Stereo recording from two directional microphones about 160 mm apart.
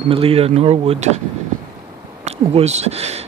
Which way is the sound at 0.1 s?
35° right (ahead or behind).